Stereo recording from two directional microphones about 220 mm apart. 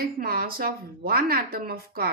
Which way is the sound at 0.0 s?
45° right (ahead or behind).